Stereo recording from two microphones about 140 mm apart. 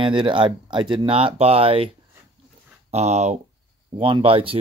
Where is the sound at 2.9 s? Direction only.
50° right (ahead or behind).